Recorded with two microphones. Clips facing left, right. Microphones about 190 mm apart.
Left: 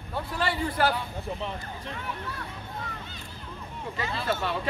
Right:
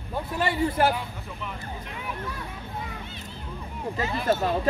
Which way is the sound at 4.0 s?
20° right (ahead or behind).